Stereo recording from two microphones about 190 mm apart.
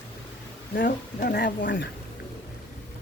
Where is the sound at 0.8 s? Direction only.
50° left (ahead or behind); by 1.9 s 70° left (ahead or behind).